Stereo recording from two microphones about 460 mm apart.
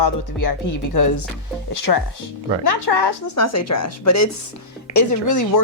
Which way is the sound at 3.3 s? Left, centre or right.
Left.